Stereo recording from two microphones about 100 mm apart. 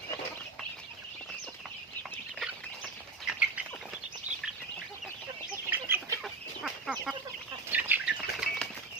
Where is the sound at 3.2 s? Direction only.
10° right (ahead or behind).